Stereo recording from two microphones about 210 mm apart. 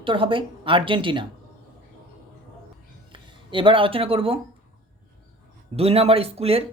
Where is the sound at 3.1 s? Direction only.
25° right (ahead or behind).